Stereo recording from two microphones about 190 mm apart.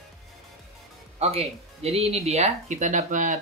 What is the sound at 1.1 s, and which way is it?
Speech, 35° right (ahead or behind).